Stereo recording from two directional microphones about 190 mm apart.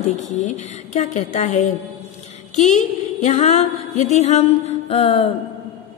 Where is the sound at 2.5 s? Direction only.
40° left (ahead or behind).